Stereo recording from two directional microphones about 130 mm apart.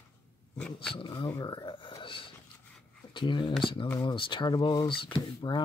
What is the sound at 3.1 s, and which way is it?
Speech, 35° left (ahead or behind).